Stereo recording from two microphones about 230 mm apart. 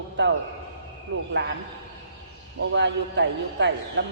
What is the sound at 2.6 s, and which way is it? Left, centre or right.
A man's voice, right.